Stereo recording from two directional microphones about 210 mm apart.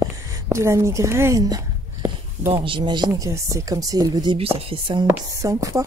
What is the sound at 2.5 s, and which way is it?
Speech, 25° right (ahead or behind).